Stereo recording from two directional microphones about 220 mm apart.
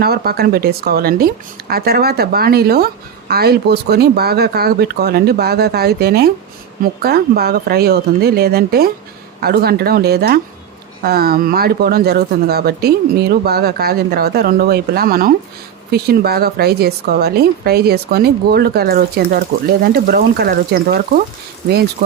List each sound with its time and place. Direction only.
0.0 s speech: 45° right (ahead or behind)